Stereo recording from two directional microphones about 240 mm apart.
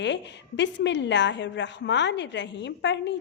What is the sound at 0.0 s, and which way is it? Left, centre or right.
A woman's voice, left.